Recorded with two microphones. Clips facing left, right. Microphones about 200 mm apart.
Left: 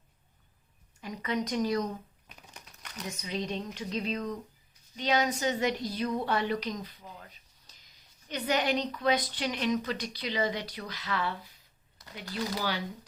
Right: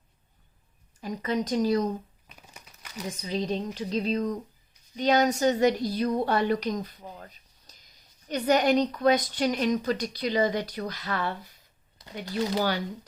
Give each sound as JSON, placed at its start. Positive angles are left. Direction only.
{"t": 1.0, "sound": "a woman's voice", "side_deg": -35}
{"t": 2.2, "sound": "crumpling", "side_deg": 0}
{"t": 3.1, "sound": "a woman's voice", "side_deg": -35}
{"t": 7.7, "sound": "a sound", "side_deg": -40}
{"t": 8.3, "sound": "a woman's voice", "side_deg": -45}